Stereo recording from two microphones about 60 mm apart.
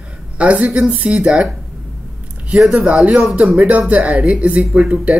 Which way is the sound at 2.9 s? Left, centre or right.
Right.